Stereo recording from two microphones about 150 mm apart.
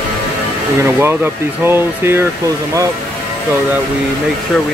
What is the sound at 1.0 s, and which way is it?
Speech, 15° right (ahead or behind).